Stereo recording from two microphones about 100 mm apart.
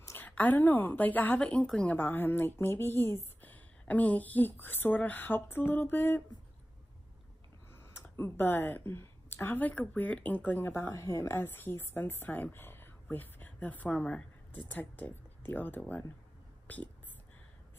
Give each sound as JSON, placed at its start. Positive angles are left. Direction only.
{"t": 0.0, "sound": "a sound", "side_deg": 25}
{"t": 0.3, "sound": "a woman's voice", "side_deg": 20}
{"t": 7.9, "sound": "a woman's voice", "side_deg": 25}